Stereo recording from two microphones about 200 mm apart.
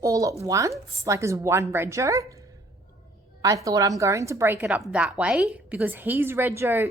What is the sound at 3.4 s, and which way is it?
A woman's voice, 15° right (ahead or behind).